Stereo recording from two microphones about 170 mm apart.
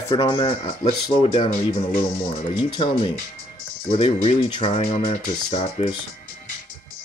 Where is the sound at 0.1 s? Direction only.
25° left (ahead or behind).